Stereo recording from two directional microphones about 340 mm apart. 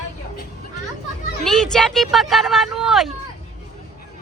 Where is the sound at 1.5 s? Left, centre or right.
Centre.